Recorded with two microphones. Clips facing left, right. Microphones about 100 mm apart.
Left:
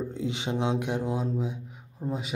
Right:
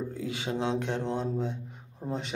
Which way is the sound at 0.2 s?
20° left (ahead or behind).